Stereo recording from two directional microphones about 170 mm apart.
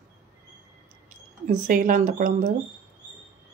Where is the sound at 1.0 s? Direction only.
55° right (ahead or behind).